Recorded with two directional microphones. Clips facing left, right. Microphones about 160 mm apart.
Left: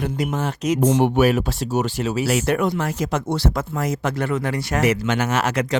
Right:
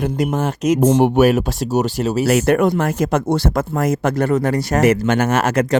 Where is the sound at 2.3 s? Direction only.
50° right (ahead or behind).